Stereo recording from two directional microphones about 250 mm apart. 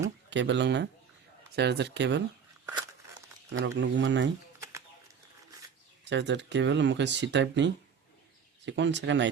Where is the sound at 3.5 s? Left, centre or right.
Right.